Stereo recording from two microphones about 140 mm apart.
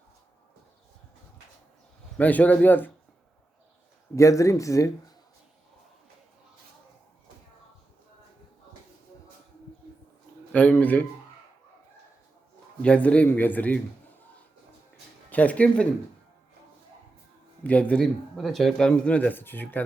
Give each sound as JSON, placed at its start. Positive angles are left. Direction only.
{"t": 2.1, "sound": "a man's voice", "side_deg": 10}
{"t": 4.1, "sound": "a man's voice", "side_deg": 20}
{"t": 10.5, "sound": "a man's voice", "side_deg": 10}
{"t": 12.8, "sound": "a man's voice", "side_deg": 10}
{"t": 15.3, "sound": "a man's voice", "side_deg": 10}
{"t": 17.6, "sound": "a man's voice", "side_deg": 10}